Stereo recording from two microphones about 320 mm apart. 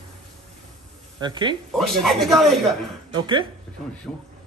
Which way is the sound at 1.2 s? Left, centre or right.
Centre.